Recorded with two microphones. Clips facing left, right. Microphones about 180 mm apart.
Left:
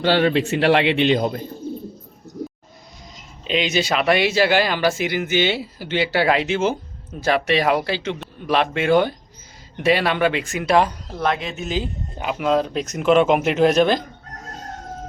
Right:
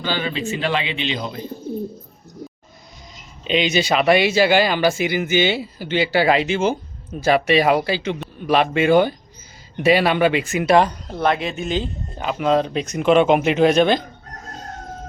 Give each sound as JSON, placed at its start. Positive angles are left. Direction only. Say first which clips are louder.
{"t": 0.0, "sound": "a man's voice", "louder": "left 7 dB", "side_deg": 65}
{"t": 3.4, "sound": "speech", "louder": "right 2 dB", "side_deg": 0}